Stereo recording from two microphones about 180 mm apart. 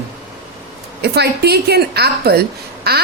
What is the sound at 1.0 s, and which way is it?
A woman's voice, 65° right (ahead or behind).